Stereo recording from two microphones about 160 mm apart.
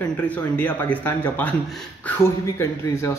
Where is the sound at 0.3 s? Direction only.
10° left (ahead or behind).